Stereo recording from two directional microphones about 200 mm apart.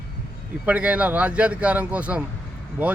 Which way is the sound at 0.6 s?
5° right (ahead or behind).